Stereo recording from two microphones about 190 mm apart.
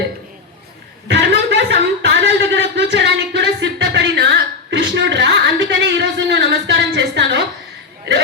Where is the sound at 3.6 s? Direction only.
70° right (ahead or behind).